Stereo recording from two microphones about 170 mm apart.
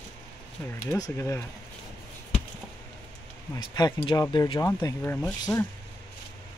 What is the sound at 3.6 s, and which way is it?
Speech, 25° left (ahead or behind).